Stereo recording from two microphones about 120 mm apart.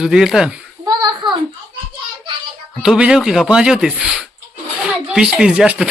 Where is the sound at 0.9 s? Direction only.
40° right (ahead or behind).